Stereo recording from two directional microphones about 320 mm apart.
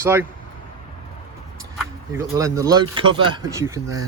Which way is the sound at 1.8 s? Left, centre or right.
Centre.